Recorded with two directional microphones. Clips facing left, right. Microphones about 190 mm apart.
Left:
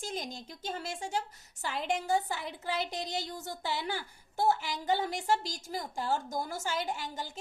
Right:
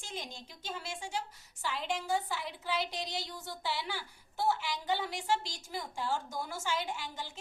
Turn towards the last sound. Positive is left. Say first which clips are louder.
# left 3 dB
turn(degrees=45)  # may be behind; listen again after turning